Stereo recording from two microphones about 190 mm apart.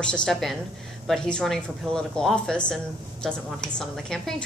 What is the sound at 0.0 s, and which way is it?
A woman's voice, 5° left (ahead or behind).